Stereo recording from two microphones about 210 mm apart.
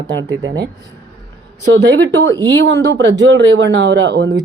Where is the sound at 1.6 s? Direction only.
55° right (ahead or behind).